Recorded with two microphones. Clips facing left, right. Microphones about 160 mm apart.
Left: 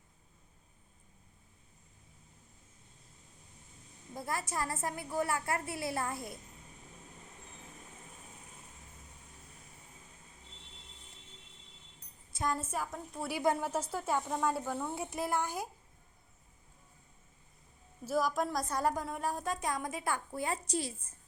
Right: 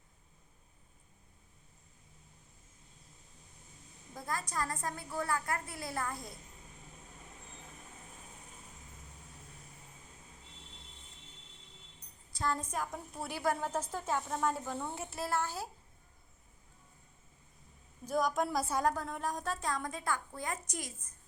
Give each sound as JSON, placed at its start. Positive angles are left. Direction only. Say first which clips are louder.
{"t": 4.1, "sound": "a woman's voice", "louder": "left 2 dB", "side_deg": 25}
{"t": 12.4, "sound": "a woman's voice", "louder": "left 1 dB", "side_deg": 10}
{"t": 13.3, "sound": "a woman's voice", "louder": "left 3 dB", "side_deg": 20}
{"t": 13.6, "sound": "a woman's voice", "louder": "left 1 dB", "side_deg": 10}
{"t": 18.0, "sound": "a woman's voice", "louder": "even", "side_deg": 0}
{"t": 18.9, "sound": "a woman's voice", "louder": "even", "side_deg": 5}
{"t": 20.3, "sound": "a woman's voice", "louder": "left 5 dB", "side_deg": 25}